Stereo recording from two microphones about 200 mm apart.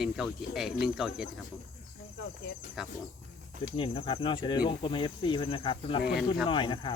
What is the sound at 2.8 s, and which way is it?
Speech, centre (ahead or behind).